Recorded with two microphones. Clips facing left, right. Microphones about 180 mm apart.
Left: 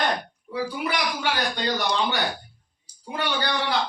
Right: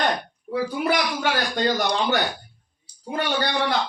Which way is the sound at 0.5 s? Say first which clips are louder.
Right 4 dB; 45° right (ahead or behind).